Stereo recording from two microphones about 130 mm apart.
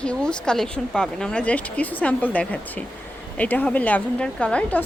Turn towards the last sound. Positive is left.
turn(degrees=10)  # may be behind; listen again after turning